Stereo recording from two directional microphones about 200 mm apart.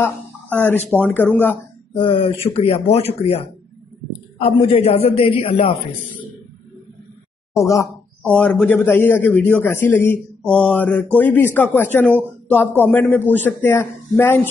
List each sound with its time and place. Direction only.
0.0 s a man's voice: 10° left (ahead or behind)
2.0 s speech: 25° left (ahead or behind)
7.5 s a man's voice: 15° left (ahead or behind)